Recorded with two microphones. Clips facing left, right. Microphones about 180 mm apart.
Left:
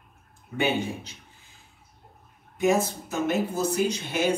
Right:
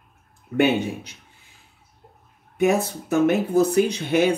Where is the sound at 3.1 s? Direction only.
60° right (ahead or behind).